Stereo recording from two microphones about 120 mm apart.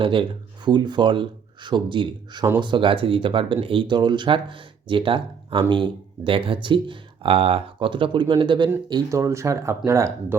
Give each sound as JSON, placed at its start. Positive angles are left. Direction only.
{"t": 0.0, "sound": "speech", "side_deg": -45}
{"t": 8.9, "sound": "speech", "side_deg": -25}